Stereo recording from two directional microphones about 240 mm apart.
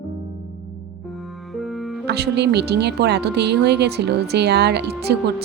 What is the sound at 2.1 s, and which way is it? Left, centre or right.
Speech, right.